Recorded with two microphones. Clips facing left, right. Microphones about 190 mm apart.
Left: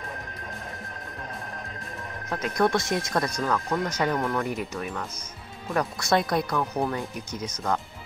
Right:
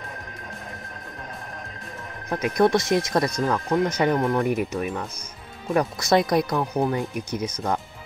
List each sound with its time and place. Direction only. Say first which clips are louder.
2.3 s speech: right 4 dB; 20° right (ahead or behind)